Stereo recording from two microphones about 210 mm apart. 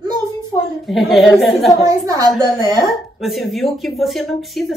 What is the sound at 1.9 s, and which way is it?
Speech, 15° right (ahead or behind).